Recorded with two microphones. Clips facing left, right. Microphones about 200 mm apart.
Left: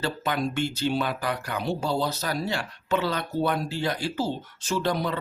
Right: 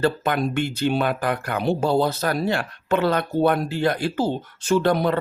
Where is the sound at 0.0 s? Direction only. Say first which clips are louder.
Right 6 dB; 55° right (ahead or behind).